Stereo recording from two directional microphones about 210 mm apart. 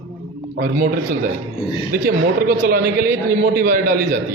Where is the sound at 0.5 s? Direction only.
45° right (ahead or behind).